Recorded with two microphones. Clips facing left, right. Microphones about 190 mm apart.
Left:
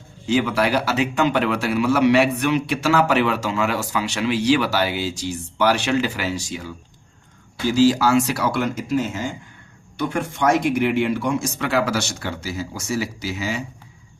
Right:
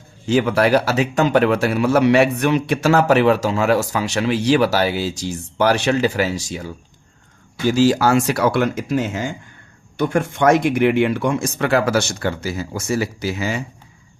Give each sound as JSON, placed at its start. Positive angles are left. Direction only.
{"t": 0.3, "sound": "a man's voice", "side_deg": -45}
{"t": 7.7, "sound": "a man's voice", "side_deg": -50}